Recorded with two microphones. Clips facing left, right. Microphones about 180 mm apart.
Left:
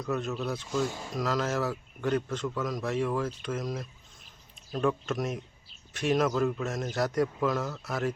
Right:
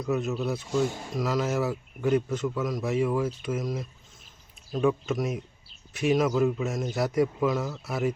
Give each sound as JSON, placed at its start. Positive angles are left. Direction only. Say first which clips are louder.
{"t": 0.0, "sound": "a man's voice", "louder": "right 4 dB", "side_deg": -5}